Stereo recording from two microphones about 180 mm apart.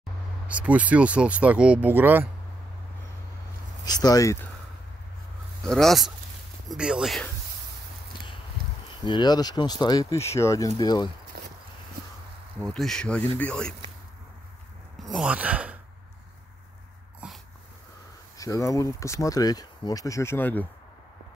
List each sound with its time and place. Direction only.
0.5 s speech: 10° right (ahead or behind)
3.8 s speech: 20° left (ahead or behind)
5.6 s speech: centre (ahead or behind)
9.0 s speech: 25° left (ahead or behind)
11.3 s a sound: 60° right (ahead or behind)
12.5 s speech: centre (ahead or behind)
15.0 s speech: centre (ahead or behind)
17.2 s dog: 5° right (ahead or behind)
18.4 s speech: 20° left (ahead or behind)